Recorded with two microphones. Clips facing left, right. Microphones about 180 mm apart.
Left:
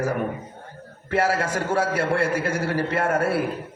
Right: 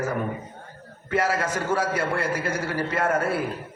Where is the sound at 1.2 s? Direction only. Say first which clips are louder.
Left 2 dB; 30° left (ahead or behind).